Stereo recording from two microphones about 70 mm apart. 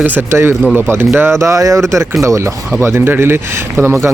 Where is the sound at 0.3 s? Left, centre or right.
Right.